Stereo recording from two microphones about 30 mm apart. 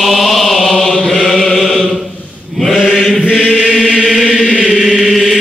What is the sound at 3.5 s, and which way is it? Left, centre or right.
Chant, centre.